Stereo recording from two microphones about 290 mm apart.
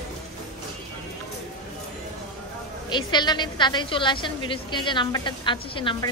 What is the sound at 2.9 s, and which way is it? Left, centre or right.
A woman's voice, centre.